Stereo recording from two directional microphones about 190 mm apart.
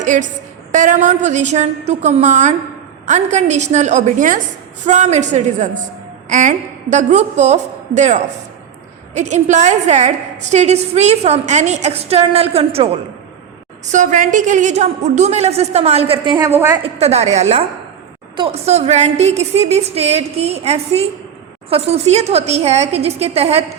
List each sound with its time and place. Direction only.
0.0 s a woman's voice: 40° right (ahead or behind); by 16.5 s 25° right (ahead or behind)
16.5 s a woman's voice: 15° right (ahead or behind)
16.8 s a woman's voice: 35° right (ahead or behind)